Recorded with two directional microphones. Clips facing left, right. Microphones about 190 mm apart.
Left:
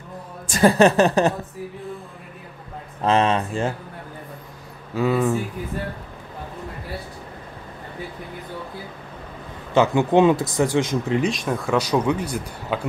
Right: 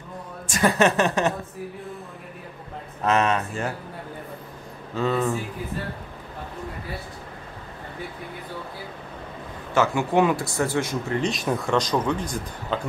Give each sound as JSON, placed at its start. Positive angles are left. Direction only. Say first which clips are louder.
{"t": 0.5, "sound": "a woman's voice", "louder": "left 5 dB", "side_deg": 35}
{"t": 3.0, "sound": "speech", "louder": "left 3 dB", "side_deg": 30}
{"t": 4.9, "sound": "speech", "louder": "left 3 dB", "side_deg": 5}
{"t": 9.8, "sound": "speech", "louder": "left 4 dB", "side_deg": 20}
{"t": 11.2, "sound": "speech", "louder": "left 1 dB", "side_deg": 0}